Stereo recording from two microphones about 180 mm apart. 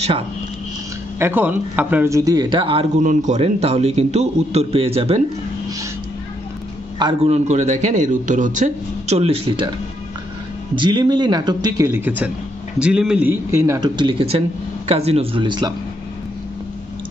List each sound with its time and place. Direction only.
1.2 s speech: 10° right (ahead or behind); by 2.9 s 30° right (ahead or behind)
3.0 s a man's voice: 45° right (ahead or behind)
7.0 s a man's voice: 30° right (ahead or behind)
10.8 s a man's voice: 25° right (ahead or behind)